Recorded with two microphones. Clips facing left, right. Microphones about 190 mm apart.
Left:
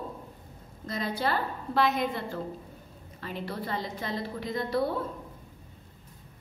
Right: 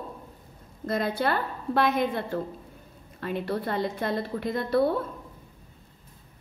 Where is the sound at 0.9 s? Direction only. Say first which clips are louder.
Right 4 dB; 55° right (ahead or behind).